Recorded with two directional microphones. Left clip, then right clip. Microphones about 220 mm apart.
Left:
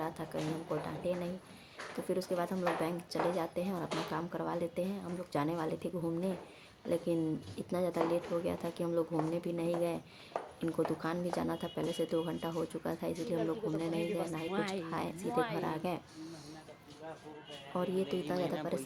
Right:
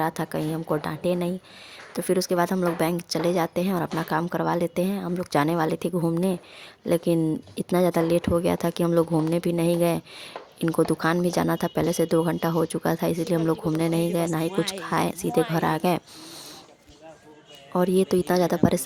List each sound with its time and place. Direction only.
0.0 s speech: 45° right (ahead or behind)
17.7 s speech: 45° right (ahead or behind)